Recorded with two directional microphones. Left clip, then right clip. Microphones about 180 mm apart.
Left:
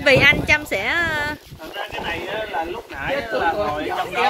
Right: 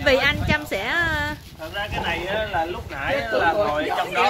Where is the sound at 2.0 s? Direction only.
15° right (ahead or behind).